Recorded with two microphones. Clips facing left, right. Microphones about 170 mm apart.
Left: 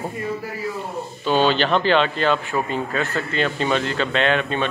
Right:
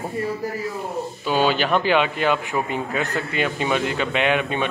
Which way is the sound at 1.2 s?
10° right (ahead or behind).